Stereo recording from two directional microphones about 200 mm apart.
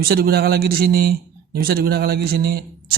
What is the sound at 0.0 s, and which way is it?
Speech, 50° right (ahead or behind).